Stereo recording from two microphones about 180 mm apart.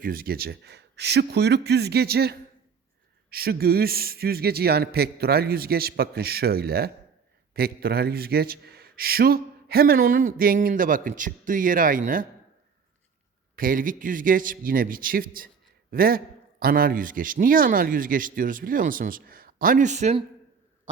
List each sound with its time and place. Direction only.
0.0 s a man's voice: 55° right (ahead or behind)
13.6 s a man's voice: 50° right (ahead or behind)